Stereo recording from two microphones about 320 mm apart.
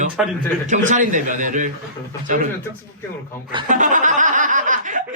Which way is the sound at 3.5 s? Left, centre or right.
Centre.